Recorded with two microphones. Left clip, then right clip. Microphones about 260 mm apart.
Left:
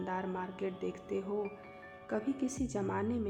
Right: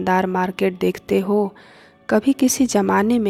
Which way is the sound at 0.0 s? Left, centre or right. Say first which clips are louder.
Right 19 dB; right.